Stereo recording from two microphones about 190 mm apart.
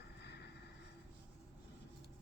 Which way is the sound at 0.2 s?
60° left (ahead or behind).